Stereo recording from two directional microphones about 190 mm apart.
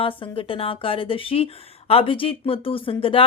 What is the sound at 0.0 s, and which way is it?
A woman's voice, 25° left (ahead or behind).